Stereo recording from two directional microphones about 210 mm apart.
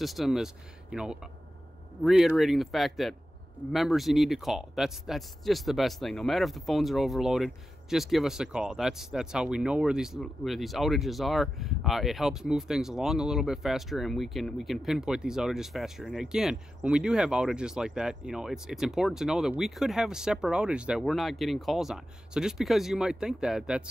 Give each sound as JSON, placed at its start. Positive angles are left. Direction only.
{"t": 0.0, "sound": "speech", "side_deg": 0}